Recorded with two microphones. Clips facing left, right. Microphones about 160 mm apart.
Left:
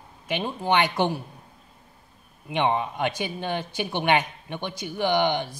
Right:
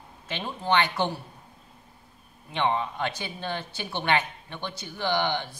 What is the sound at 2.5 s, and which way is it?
Speech, 15° left (ahead or behind).